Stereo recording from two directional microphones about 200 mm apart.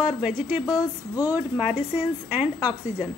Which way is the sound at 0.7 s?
20° left (ahead or behind).